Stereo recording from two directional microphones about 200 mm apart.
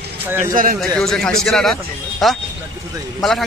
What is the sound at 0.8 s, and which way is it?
Speech, centre (ahead or behind).